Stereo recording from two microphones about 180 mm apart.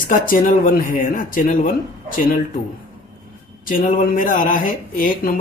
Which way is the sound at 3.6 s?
50° left (ahead or behind).